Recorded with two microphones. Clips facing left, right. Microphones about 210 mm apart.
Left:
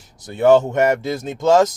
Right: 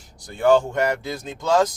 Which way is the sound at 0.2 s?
20° left (ahead or behind).